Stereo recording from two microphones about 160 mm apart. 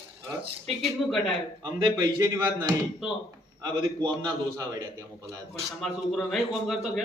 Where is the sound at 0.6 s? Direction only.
Centre (ahead or behind).